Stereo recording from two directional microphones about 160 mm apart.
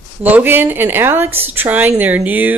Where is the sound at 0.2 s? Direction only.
10° right (ahead or behind).